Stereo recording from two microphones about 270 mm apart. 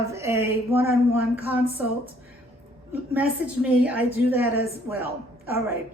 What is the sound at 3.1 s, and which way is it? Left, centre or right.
A woman's voice, centre.